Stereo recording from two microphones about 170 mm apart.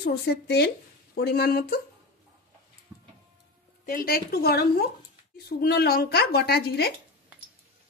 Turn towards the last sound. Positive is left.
turn(degrees=70)  # may be behind; listen again after turning